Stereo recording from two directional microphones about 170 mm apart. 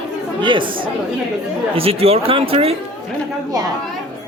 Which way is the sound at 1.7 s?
35° right (ahead or behind).